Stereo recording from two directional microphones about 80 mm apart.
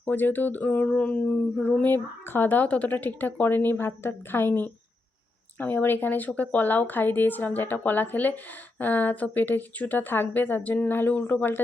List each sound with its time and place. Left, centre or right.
0.0 s speech: left
0.9 s a sound: centre
1.6 s speech: centre